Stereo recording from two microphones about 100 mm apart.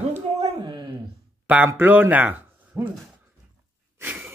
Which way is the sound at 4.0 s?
20° right (ahead or behind).